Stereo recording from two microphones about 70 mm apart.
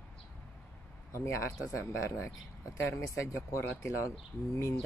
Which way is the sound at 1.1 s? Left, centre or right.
Left.